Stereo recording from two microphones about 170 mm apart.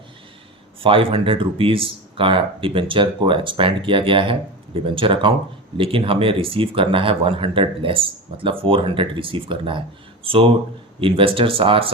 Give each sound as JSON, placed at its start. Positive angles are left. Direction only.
{"t": 0.8, "sound": "speech", "side_deg": -30}
{"t": 11.0, "sound": "speech", "side_deg": -30}